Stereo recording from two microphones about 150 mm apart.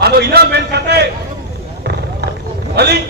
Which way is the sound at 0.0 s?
90° right.